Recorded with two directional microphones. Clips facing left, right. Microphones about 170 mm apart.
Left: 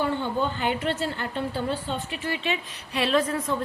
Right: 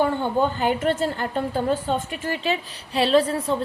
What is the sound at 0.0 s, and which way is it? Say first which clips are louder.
A woman's voice: right 5 dB; 50° right (ahead or behind).